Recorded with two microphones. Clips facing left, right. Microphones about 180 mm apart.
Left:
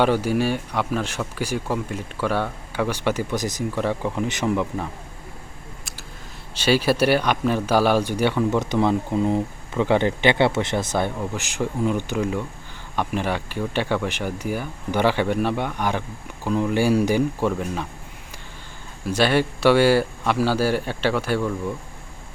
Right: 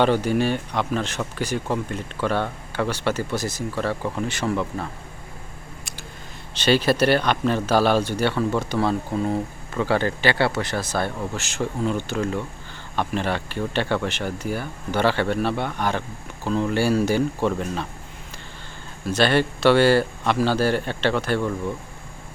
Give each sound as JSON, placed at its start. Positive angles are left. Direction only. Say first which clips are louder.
{"t": 0.0, "sound": "speech", "louder": "even", "side_deg": 10}
{"t": 6.5, "sound": "speech", "louder": "even", "side_deg": 10}
{"t": 19.0, "sound": "speech", "louder": "even", "side_deg": 10}